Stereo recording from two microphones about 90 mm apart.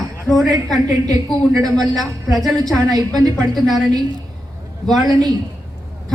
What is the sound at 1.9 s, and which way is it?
Speech, centre (ahead or behind).